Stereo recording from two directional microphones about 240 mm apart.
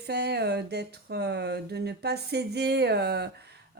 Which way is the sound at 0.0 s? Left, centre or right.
Right.